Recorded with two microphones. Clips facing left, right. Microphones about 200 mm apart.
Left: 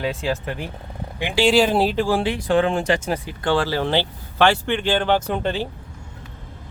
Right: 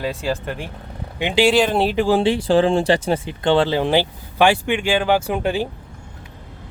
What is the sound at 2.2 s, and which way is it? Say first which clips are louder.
Speech: right 3 dB; 30° right (ahead or behind).